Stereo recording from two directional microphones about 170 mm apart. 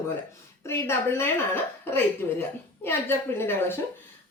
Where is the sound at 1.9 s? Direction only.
15° left (ahead or behind).